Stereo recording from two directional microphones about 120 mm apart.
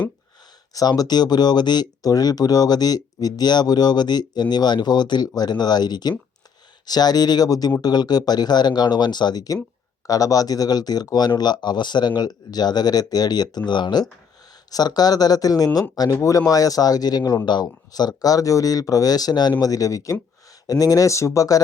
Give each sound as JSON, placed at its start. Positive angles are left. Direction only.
{"t": 0.7, "sound": "speech", "side_deg": 30}